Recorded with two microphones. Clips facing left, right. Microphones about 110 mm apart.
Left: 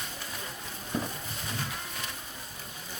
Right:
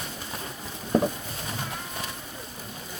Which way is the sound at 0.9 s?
55° right (ahead or behind).